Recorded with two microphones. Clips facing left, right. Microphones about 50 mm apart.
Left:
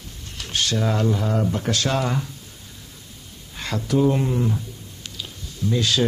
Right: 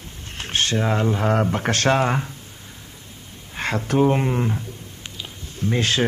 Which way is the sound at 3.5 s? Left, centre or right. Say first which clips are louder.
Right 1 dB; right.